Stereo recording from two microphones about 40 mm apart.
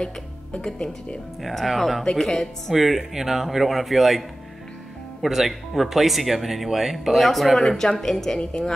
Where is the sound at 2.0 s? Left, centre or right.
Centre.